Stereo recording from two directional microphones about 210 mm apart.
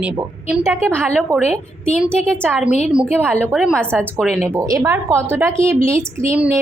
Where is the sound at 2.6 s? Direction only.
35° left (ahead or behind).